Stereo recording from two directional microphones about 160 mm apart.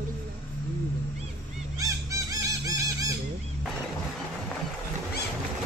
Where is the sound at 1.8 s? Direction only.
20° right (ahead or behind).